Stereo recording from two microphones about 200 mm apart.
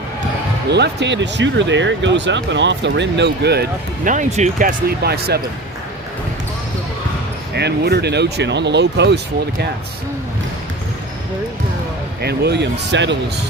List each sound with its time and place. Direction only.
0.7 s speech: 60° right (ahead or behind); by 4.7 s 35° right (ahead or behind)
4.9 s speech: 50° right (ahead or behind)
7.5 s speech: 55° right (ahead or behind)
12.2 s speech: 55° right (ahead or behind)